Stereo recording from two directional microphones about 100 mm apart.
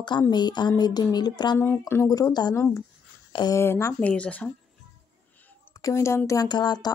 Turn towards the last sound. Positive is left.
turn(degrees=45)  # may be behind; listen again after turning